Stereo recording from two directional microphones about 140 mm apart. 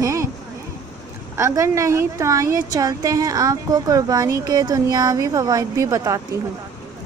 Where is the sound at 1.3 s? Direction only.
20° right (ahead or behind).